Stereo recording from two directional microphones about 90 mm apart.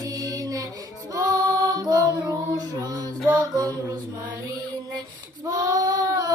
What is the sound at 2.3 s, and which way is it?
Music, 45° right (ahead or behind).